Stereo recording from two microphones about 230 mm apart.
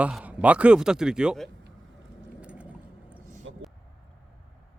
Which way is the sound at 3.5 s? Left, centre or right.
Right.